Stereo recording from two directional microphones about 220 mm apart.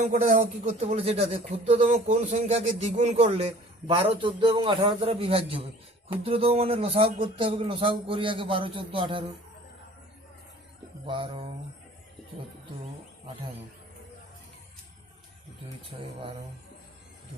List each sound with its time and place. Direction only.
0.0 s speech: 35° right (ahead or behind)
11.0 s speech: 25° right (ahead or behind)